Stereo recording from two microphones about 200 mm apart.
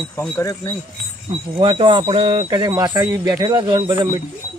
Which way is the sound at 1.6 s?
25° right (ahead or behind).